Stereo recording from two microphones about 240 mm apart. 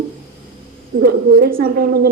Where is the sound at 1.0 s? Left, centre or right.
Right.